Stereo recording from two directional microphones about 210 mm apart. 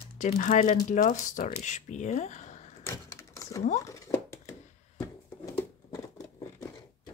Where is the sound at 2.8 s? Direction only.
15° left (ahead or behind).